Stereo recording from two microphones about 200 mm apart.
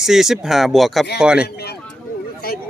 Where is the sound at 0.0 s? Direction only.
Centre (ahead or behind).